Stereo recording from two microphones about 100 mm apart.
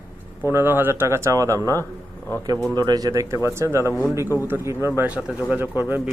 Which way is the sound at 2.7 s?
40° right (ahead or behind).